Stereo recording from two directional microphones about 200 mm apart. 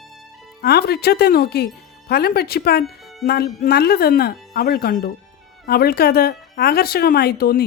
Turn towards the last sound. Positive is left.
turn(degrees=50)  # may be behind; listen again after turning